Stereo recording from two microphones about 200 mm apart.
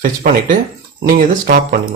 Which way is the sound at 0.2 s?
45° right (ahead or behind).